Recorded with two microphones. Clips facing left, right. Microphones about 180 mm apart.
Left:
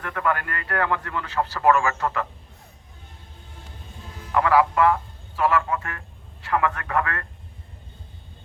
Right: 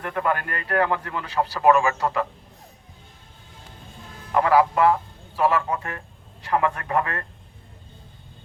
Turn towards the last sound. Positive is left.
turn(degrees=-25)  # may be behind; listen again after turning